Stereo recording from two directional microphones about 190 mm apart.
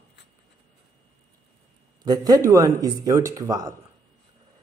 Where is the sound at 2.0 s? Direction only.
20° right (ahead or behind).